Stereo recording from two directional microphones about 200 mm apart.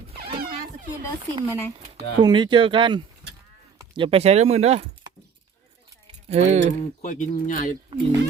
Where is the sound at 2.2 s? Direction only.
25° right (ahead or behind).